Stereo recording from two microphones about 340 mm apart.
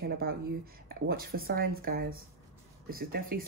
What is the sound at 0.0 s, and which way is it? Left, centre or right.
Speech, right.